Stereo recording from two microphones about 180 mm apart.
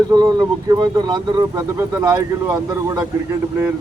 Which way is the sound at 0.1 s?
20° right (ahead or behind).